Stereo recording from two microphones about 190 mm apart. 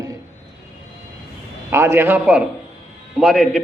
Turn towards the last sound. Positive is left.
turn(degrees=0)  # may be behind; listen again after turning